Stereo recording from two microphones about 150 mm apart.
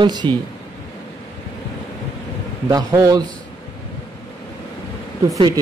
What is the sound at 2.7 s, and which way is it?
Speech, 25° right (ahead or behind).